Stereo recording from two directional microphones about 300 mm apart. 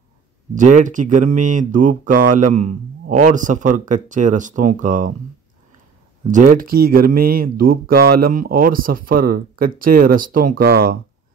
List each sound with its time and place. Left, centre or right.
0.7 s speech: right
6.3 s speech: right